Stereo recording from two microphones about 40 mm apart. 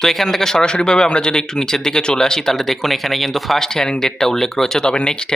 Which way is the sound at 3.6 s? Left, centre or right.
Centre.